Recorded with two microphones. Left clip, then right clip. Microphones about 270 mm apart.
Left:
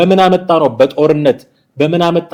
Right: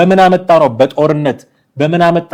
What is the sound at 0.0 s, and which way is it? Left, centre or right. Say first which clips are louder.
A man's voice: right 1 dB; right.